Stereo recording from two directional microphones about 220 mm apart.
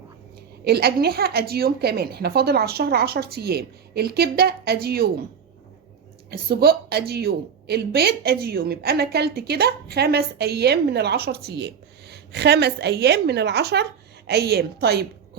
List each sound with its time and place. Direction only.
0.6 s a woman's voice: 45° right (ahead or behind)
6.3 s a woman's voice: 45° right (ahead or behind)